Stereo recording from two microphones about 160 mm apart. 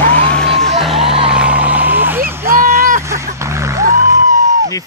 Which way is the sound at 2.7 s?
60° right (ahead or behind).